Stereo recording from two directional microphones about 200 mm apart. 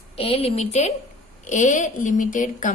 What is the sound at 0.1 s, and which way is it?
A woman's voice, 30° left (ahead or behind).